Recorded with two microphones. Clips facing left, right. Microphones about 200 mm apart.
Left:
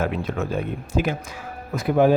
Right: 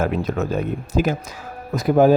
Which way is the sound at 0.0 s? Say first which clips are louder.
Right 3 dB; 40° right (ahead or behind).